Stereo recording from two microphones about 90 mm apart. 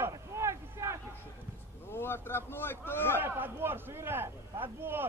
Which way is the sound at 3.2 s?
25° right (ahead or behind).